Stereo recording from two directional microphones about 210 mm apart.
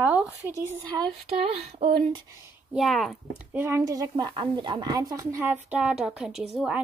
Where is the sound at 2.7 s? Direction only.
Centre (ahead or behind).